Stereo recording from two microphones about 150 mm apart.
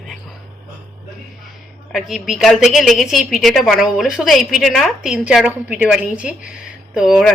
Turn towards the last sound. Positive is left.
turn(degrees=0)  # may be behind; listen again after turning